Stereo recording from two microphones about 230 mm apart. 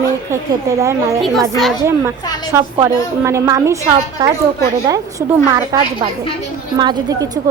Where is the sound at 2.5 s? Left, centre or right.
Centre.